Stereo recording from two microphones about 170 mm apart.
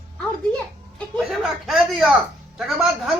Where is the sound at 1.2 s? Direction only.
Centre (ahead or behind).